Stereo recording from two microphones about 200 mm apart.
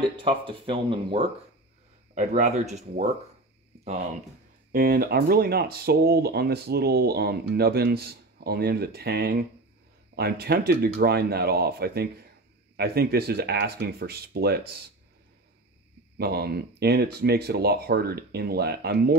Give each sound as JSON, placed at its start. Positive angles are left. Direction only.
{"t": 0.2, "sound": "speech", "side_deg": -25}
{"t": 4.7, "sound": "speech", "side_deg": -50}
{"t": 16.2, "sound": "speech", "side_deg": -55}